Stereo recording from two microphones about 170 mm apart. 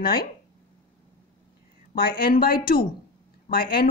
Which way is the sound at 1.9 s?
60° left (ahead or behind).